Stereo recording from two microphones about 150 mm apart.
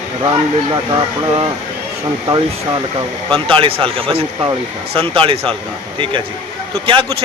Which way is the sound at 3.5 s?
35° right (ahead or behind).